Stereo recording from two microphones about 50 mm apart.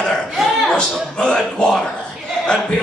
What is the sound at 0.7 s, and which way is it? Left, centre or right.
Speech, centre.